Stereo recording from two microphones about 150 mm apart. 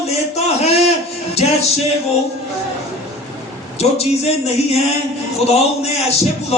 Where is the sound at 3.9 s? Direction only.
45° left (ahead or behind).